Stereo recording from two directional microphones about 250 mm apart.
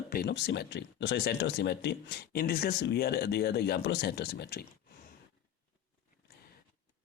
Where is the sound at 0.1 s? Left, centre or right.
Left.